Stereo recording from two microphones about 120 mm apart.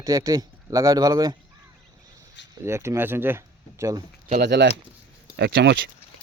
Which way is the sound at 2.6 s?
20° right (ahead or behind).